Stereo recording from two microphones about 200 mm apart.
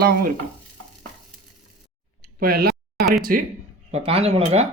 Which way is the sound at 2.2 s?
50° right (ahead or behind).